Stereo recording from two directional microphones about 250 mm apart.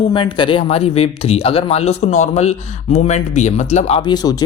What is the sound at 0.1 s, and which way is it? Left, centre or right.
A woman's voice, centre.